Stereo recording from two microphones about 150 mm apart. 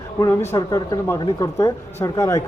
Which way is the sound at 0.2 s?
20° left (ahead or behind).